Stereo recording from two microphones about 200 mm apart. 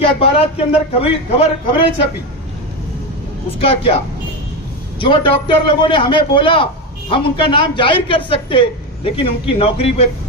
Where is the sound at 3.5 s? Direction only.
30° left (ahead or behind).